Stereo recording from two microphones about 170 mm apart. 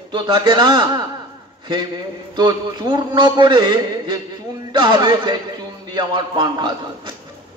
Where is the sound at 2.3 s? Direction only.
25° right (ahead or behind).